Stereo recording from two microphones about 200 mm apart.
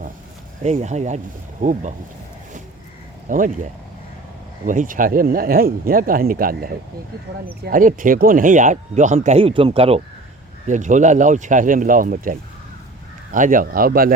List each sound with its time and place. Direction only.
0.6 s speech: 35° right (ahead or behind)
3.2 s speech: 40° right (ahead or behind)
10.7 s speech: 40° right (ahead or behind)